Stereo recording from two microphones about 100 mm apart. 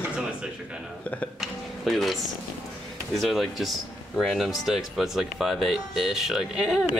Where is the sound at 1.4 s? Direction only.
Centre (ahead or behind).